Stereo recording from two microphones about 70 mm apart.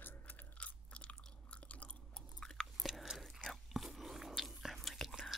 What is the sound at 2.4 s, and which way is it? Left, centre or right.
Chewing, centre.